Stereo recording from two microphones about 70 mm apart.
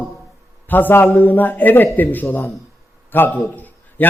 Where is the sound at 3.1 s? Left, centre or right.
Left.